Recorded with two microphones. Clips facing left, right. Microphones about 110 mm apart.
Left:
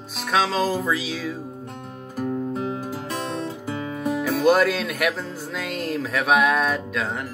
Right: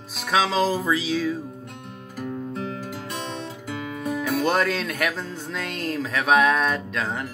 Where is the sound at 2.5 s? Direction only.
30° left (ahead or behind).